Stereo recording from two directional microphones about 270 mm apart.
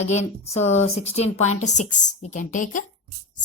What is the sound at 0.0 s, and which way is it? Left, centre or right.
A woman's voice, left.